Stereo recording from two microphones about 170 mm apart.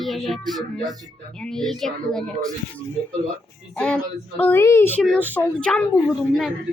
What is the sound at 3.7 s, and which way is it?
A child's voice, 5° left (ahead or behind).